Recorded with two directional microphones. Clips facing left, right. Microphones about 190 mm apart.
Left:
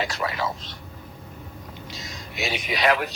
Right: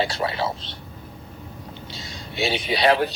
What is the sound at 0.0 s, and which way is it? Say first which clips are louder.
Speech: right 3 dB; 30° right (ahead or behind).